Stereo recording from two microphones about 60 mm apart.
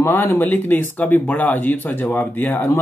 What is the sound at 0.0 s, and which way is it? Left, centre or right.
Speech, left.